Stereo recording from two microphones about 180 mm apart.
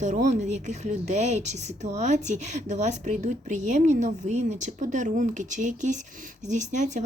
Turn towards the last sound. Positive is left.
turn(degrees=-40)  # may be behind; listen again after turning